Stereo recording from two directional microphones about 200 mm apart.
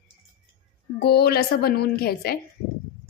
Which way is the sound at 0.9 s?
55° left (ahead or behind).